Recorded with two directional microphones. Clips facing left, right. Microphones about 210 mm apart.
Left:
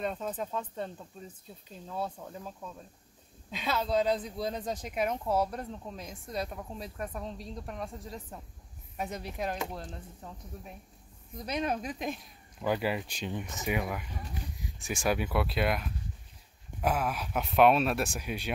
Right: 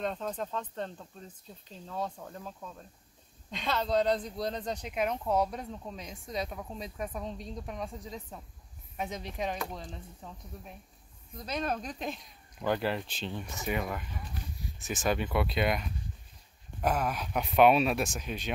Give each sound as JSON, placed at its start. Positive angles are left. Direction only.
{"t": 0.0, "sound": "speech", "side_deg": 5}
{"t": 11.3, "sound": "speech", "side_deg": 15}